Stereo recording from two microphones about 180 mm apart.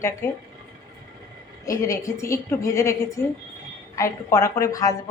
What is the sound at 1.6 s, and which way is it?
A woman's voice, 15° left (ahead or behind).